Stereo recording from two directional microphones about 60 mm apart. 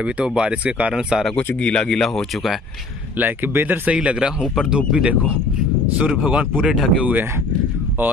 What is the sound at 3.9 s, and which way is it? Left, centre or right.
Speech, centre.